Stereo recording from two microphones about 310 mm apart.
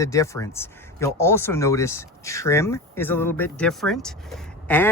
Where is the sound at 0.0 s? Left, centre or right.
Centre.